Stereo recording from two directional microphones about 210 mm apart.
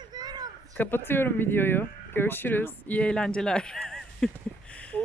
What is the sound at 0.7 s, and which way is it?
Speech, 10° left (ahead or behind).